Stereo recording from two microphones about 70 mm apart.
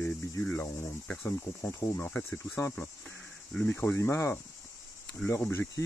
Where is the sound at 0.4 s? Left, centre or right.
Left.